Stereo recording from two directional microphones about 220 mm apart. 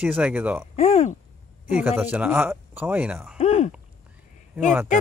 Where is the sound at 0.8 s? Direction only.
30° left (ahead or behind).